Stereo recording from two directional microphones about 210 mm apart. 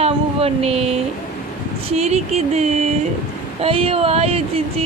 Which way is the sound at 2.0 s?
30° right (ahead or behind).